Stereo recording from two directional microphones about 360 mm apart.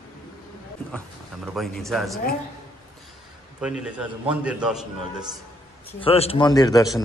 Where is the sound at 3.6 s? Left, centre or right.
Centre.